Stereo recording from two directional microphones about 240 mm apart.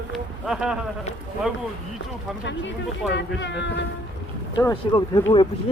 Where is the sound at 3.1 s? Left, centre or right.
Left.